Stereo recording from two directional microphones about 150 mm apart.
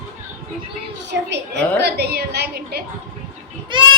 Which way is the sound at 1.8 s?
90° right.